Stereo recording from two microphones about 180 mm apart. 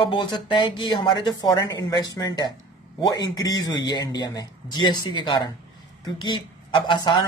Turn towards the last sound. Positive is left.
turn(degrees=25)  # may be behind; listen again after turning